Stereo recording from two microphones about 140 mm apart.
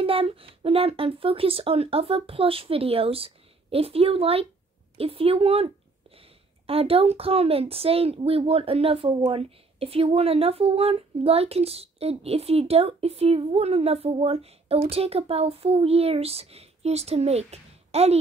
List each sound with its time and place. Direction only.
0.0 s a woman's voice: 40° right (ahead or behind)